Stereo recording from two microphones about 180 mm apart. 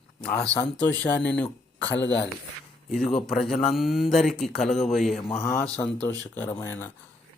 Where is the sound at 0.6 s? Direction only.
10° left (ahead or behind).